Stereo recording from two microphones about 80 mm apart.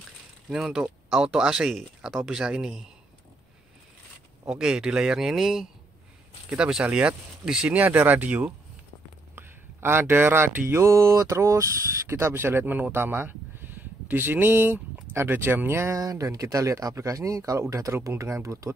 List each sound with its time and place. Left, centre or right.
0.5 s speech: centre
4.5 s speech: centre
7.8 s speech: right
15.9 s speech: right